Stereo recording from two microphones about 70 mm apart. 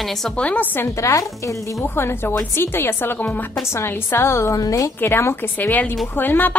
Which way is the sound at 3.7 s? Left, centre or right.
Left.